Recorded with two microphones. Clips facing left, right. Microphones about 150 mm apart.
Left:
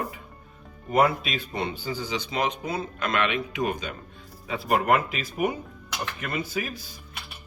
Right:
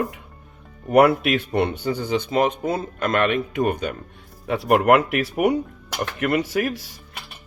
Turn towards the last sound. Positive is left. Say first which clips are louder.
# right 8 dB
turn(degrees=-80)